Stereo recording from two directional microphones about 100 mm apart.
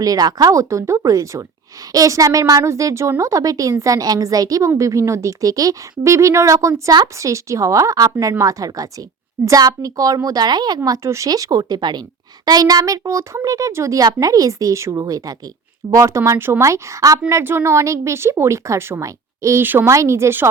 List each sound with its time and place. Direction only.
0.0 s speech: 40° right (ahead or behind)
10.8 s a woman's voice: 30° right (ahead or behind)
19.6 s a woman's voice: 20° right (ahead or behind)
19.9 s a woman's voice: 30° right (ahead or behind)